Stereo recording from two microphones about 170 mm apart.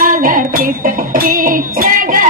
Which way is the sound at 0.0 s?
55° right (ahead or behind).